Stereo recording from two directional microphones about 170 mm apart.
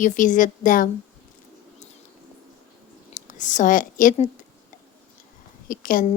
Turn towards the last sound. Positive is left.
turn(degrees=55)  # may be behind; listen again after turning